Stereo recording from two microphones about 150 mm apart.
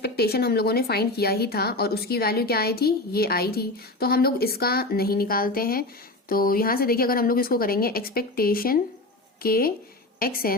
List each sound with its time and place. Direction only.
0.0 s a woman's voice: 90° left